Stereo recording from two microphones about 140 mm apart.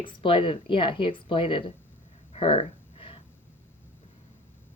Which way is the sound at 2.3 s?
45° left (ahead or behind).